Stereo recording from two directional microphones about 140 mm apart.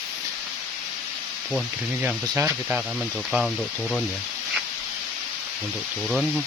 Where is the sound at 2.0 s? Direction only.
15° right (ahead or behind).